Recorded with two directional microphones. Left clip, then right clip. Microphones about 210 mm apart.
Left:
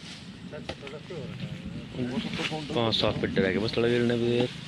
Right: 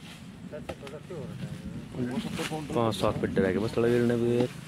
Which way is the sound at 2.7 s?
10° right (ahead or behind).